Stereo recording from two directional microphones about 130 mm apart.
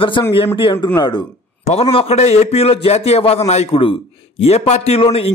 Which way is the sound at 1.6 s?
55° left (ahead or behind).